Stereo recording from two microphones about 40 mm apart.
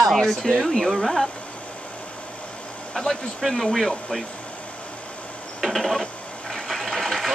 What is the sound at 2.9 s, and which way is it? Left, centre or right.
Speech, centre.